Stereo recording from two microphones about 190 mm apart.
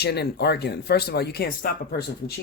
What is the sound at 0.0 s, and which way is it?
Speech, 60° left (ahead or behind).